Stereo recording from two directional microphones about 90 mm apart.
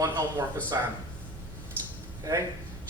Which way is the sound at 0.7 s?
40° right (ahead or behind).